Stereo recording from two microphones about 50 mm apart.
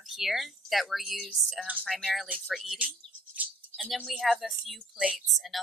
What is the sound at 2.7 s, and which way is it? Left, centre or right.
Bird, right.